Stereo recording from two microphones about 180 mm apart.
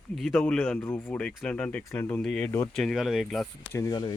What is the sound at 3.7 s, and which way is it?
Speech, 20° left (ahead or behind).